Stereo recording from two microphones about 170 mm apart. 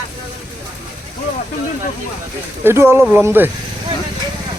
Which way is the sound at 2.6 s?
15° right (ahead or behind).